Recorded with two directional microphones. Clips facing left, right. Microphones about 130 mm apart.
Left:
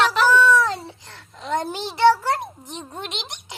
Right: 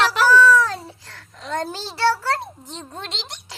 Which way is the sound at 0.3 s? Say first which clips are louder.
Right 2 dB; 20° left (ahead or behind).